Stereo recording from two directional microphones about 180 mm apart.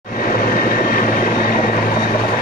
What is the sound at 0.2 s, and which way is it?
Vehicle, 50° left (ahead or behind).